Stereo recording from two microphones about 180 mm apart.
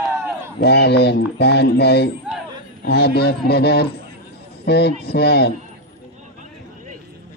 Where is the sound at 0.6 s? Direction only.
65° left (ahead or behind).